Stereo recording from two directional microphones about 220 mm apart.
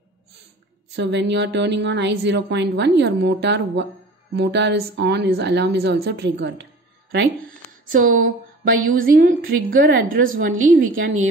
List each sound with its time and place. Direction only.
0.9 s a woman's voice: 50° right (ahead or behind)
7.9 s a woman's voice: 40° right (ahead or behind)